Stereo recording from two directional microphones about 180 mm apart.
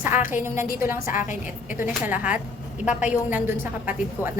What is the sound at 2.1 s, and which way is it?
A woman's voice, 10° right (ahead or behind).